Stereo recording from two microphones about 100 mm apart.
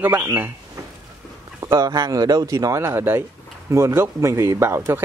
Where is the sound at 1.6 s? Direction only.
35° right (ahead or behind).